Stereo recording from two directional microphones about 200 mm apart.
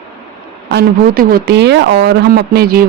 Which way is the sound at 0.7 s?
50° right (ahead or behind).